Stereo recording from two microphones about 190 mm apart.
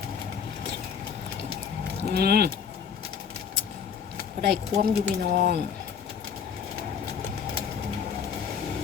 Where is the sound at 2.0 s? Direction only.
55° right (ahead or behind).